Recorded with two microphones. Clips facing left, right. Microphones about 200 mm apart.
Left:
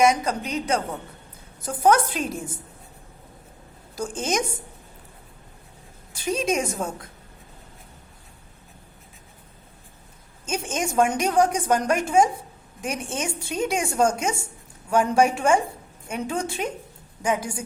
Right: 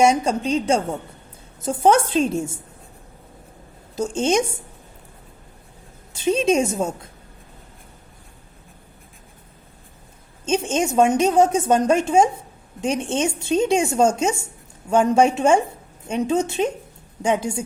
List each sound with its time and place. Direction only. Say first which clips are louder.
0.0 s a woman's voice: right 3 dB; 30° right (ahead or behind)
3.9 s a woman's voice: right 6 dB; 25° right (ahead or behind)
6.1 s a woman's voice: right 6 dB; 25° right (ahead or behind)
10.4 s a woman's voice: right 7 dB; 25° right (ahead or behind)